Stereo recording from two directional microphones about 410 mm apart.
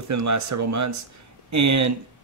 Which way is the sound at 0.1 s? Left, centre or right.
Right.